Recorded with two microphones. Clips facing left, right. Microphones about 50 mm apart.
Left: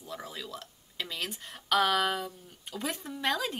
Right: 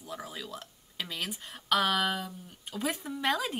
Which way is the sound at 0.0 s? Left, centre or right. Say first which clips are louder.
Even; centre.